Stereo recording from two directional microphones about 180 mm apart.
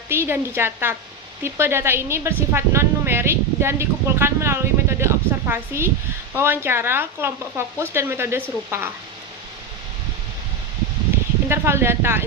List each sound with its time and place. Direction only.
0.1 s a woman's voice: 10° right (ahead or behind)
11.4 s speech: 15° right (ahead or behind)